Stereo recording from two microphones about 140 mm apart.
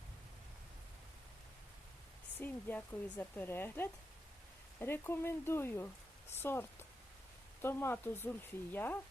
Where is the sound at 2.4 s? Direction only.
15° left (ahead or behind).